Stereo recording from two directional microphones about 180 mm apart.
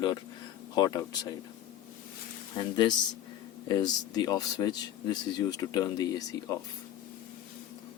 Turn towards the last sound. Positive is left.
turn(degrees=20)  # may be behind; listen again after turning